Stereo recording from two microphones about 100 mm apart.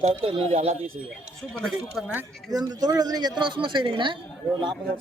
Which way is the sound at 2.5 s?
40° right (ahead or behind).